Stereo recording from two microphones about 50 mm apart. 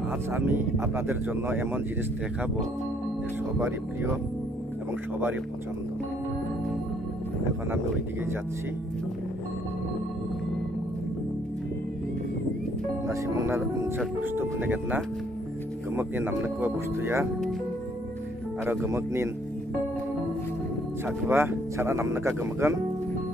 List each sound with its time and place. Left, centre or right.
0.4 s speech: right
3.5 s speech: right
13.1 s speech: right
13.9 s speech: right
18.9 s speech: right
21.3 s speech: right